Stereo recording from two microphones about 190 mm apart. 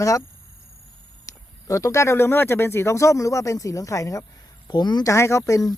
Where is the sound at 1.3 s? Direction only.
15° left (ahead or behind).